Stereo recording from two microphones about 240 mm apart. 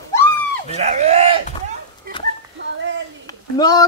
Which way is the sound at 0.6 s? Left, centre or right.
Right.